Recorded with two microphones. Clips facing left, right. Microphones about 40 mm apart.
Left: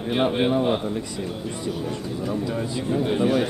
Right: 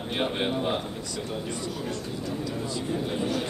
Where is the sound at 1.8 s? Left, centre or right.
Left.